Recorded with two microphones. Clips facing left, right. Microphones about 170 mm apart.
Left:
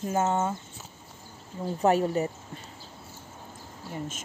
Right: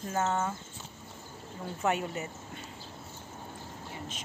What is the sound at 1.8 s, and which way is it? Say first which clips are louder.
Speech: left 8 dB; 35° left (ahead or behind).